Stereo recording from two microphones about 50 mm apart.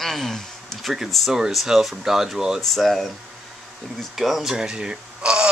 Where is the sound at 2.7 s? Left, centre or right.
Centre.